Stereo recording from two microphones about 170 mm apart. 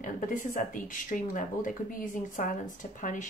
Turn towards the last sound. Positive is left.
turn(degrees=50)  # may be behind; listen again after turning